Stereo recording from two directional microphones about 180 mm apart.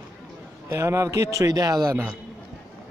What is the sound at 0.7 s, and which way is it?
A man's voice, 15° right (ahead or behind).